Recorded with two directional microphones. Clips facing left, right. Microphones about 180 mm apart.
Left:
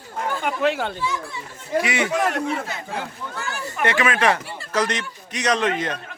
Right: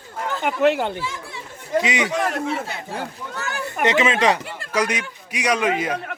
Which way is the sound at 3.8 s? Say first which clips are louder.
Right 2 dB; 20° right (ahead or behind).